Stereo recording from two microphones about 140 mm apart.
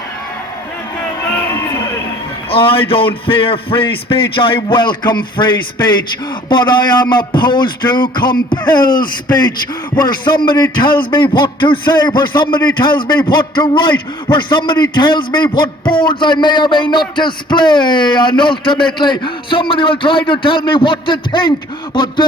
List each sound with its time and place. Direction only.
2.5 s speech: 40° left (ahead or behind)
8.8 s speech: 90° left
9.9 s speech: 35° left (ahead or behind)